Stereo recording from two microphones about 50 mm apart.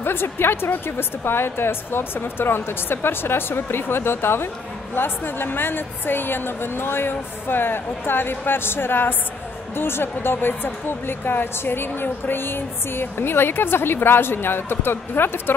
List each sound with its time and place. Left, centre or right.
0.0 s a woman's voice: left